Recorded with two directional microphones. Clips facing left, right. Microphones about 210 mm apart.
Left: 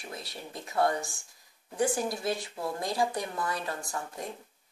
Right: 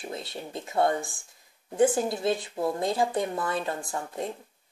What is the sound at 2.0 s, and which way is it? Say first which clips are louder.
Speech: right 5 dB; 25° right (ahead or behind).